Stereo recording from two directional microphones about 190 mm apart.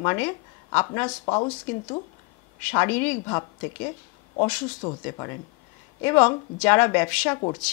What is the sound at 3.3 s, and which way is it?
Speech, 20° left (ahead or behind).